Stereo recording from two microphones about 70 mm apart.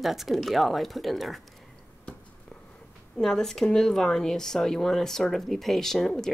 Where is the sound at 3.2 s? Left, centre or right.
Centre.